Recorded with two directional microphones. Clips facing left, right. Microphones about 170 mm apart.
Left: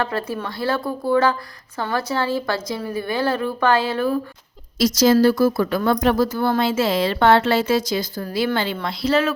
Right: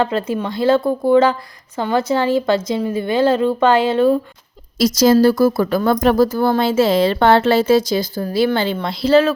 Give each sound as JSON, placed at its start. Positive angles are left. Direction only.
{"t": 0.0, "sound": "a woman's voice", "side_deg": -20}
{"t": 4.8, "sound": "a woman's voice", "side_deg": -35}